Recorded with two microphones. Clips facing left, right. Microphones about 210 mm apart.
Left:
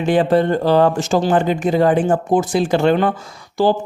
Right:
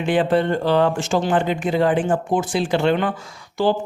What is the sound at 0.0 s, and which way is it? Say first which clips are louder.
Speech: left 3 dB; 40° left (ahead or behind).